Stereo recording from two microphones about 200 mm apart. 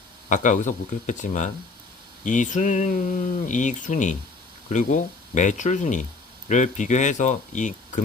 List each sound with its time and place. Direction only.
0.3 s speech: 40° left (ahead or behind)